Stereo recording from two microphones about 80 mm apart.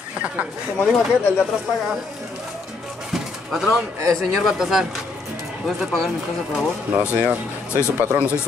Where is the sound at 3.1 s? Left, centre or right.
Centre.